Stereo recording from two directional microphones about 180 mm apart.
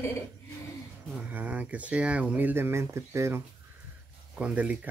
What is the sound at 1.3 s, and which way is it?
Speech, 10° right (ahead or behind).